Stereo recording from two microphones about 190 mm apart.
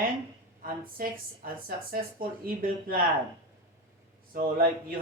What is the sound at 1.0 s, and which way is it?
Speech, 50° right (ahead or behind).